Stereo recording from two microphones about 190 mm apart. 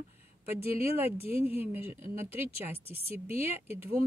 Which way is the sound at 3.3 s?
35° left (ahead or behind).